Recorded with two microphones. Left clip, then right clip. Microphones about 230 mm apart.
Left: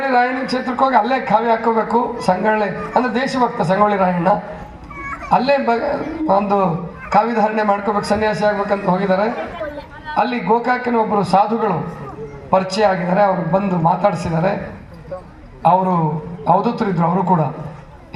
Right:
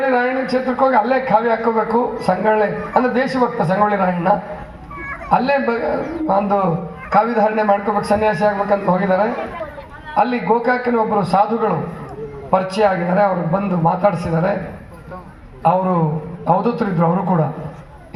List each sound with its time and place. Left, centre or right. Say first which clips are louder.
0.0 s a man's voice: left 1 dB; left
15.6 s a man's voice: left 2 dB; left